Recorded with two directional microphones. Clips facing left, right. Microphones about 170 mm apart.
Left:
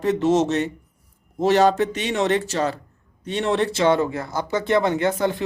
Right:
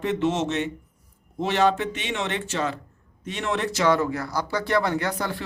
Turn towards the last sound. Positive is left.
turn(degrees=20)  # may be behind; listen again after turning